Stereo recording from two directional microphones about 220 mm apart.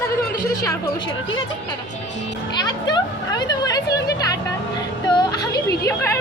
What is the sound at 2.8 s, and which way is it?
Speech, 20° left (ahead or behind).